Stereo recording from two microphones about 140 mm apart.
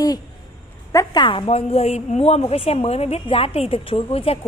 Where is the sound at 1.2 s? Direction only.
40° left (ahead or behind).